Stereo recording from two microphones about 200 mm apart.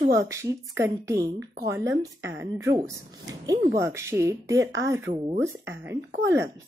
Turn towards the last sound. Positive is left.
turn(degrees=-10)  # may be behind; listen again after turning